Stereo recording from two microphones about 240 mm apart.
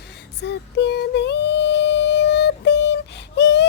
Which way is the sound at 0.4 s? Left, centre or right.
Left.